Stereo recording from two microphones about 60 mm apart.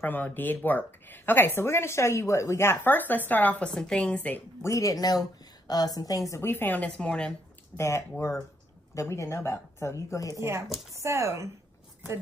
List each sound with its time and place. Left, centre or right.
0.0 s speech: left
3.7 s a woman's voice: centre
4.6 s a woman's voice: left
6.4 s speech: left
7.0 s speech: centre
7.7 s speech: left
10.3 s speech: right